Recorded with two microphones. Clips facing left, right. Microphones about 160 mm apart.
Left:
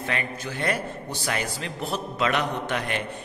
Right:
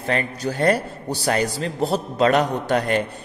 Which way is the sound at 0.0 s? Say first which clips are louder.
Right 7 dB; 35° right (ahead or behind).